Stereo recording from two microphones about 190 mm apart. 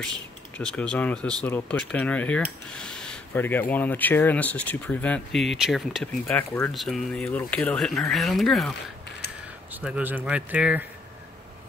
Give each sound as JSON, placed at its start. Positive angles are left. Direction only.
{"t": 0.6, "sound": "speech", "side_deg": 5}
{"t": 9.8, "sound": "speech", "side_deg": -10}